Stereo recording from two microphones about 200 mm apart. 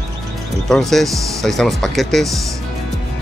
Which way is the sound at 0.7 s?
Centre (ahead or behind).